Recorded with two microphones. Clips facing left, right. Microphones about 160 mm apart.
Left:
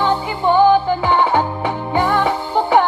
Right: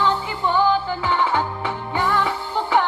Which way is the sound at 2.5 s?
55° left (ahead or behind).